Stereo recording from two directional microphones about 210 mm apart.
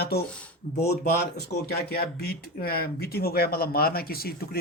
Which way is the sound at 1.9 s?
45° left (ahead or behind).